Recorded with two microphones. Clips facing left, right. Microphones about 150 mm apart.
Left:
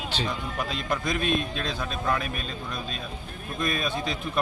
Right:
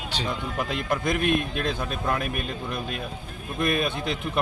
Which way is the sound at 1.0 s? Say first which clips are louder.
Right 3 dB; 60° right (ahead or behind).